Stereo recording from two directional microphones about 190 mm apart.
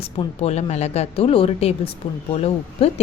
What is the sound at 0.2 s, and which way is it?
A woman's voice, 35° left (ahead or behind).